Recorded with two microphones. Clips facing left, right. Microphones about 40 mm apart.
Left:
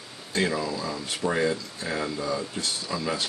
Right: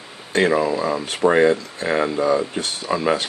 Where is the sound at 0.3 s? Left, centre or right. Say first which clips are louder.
Right 9 dB; right.